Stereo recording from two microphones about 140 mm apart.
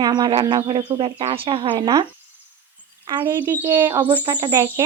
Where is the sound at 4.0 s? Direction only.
35° right (ahead or behind).